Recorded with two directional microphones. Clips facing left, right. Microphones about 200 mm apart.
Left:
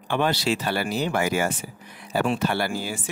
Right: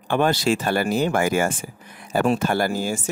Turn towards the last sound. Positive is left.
turn(degrees=-45)  # may be behind; listen again after turning